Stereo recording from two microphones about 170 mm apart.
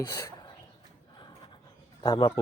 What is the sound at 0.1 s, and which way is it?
Speech, 20° left (ahead or behind).